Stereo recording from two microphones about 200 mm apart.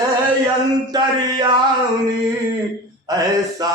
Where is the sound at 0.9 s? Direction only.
20° right (ahead or behind).